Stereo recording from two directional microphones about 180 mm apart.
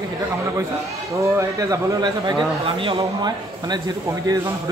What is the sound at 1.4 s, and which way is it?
A man's voice, 20° right (ahead or behind).